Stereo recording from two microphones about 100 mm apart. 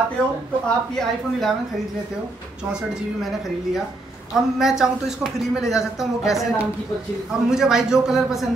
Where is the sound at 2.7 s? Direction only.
5° right (ahead or behind).